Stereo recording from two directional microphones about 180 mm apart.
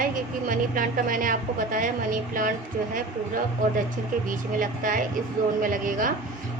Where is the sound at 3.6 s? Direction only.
50° right (ahead or behind).